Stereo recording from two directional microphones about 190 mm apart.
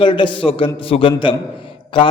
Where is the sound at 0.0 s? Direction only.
25° left (ahead or behind).